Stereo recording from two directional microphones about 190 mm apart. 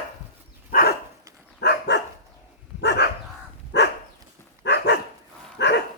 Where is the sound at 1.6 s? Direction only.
65° left (ahead or behind).